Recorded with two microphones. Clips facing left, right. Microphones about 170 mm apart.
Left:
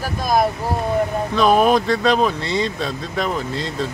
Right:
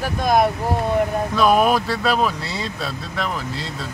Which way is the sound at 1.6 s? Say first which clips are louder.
Left 3 dB; 5° right (ahead or behind).